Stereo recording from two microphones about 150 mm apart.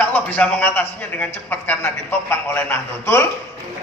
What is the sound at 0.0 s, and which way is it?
A man's voice, 10° left (ahead or behind).